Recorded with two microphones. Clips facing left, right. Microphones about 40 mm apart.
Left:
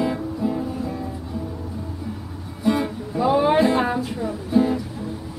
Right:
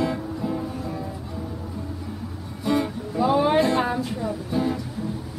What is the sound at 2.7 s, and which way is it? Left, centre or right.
Music, centre.